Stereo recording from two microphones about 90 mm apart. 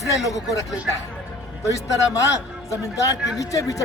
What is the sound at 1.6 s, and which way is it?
A man's voice, 35° left (ahead or behind).